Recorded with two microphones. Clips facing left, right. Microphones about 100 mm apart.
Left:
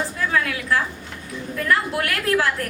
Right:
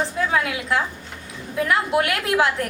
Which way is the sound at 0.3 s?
20° right (ahead or behind).